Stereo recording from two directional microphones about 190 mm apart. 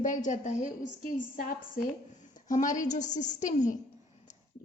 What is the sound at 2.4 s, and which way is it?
A woman's voice, 40° left (ahead or behind).